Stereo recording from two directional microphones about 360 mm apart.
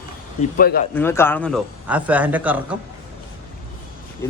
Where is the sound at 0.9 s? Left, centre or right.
Centre.